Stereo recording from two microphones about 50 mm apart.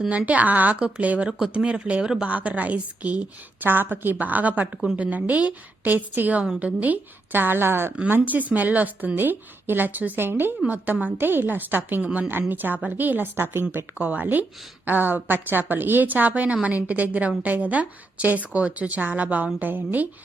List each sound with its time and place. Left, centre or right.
0.1 s a woman's voice: right
8.1 s a woman's voice: right
13.3 s a woman's voice: right
14.0 s a woman's voice: right